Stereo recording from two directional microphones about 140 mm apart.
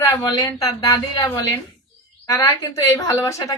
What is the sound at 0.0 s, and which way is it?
A woman's voice, 25° left (ahead or behind).